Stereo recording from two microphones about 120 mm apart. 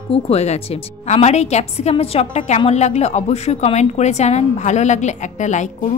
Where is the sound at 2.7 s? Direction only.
70° left (ahead or behind); by 5.6 s 85° left.